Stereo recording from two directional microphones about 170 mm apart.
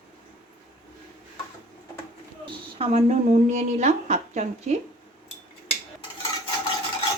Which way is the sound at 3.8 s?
40° right (ahead or behind).